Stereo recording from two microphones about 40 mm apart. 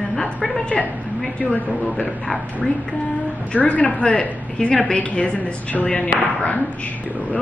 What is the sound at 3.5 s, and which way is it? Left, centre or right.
Speech, left.